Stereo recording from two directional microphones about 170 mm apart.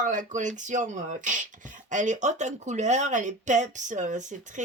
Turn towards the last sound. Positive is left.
turn(degrees=-45)  # may be behind; listen again after turning